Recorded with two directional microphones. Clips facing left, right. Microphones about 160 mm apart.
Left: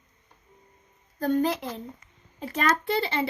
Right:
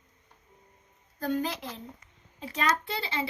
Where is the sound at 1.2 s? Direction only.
50° left (ahead or behind).